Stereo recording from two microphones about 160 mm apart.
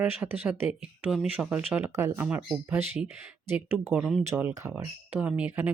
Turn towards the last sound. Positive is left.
turn(degrees=-10)  # may be behind; listen again after turning